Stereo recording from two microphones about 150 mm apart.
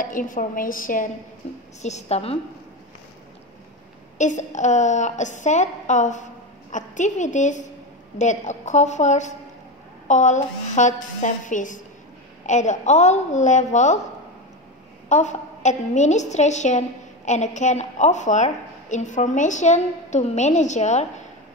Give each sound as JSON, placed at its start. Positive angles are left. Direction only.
{"t": 0.0, "sound": "a woman's voice", "side_deg": 65}
{"t": 1.8, "sound": "a woman's voice", "side_deg": 50}
{"t": 4.2, "sound": "a woman's voice", "side_deg": 55}
{"t": 15.0, "sound": "a woman's voice", "side_deg": 50}